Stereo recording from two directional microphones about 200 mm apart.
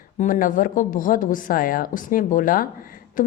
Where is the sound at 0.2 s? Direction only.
45° left (ahead or behind).